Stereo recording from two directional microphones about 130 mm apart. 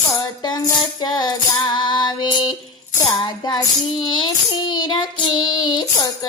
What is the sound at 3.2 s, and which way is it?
Music, 35° left (ahead or behind).